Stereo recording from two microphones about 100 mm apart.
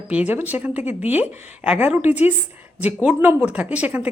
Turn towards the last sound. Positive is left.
turn(degrees=-15)  # may be behind; listen again after turning